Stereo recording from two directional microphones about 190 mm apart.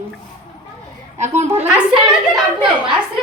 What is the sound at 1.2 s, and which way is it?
Speech, 35° right (ahead or behind).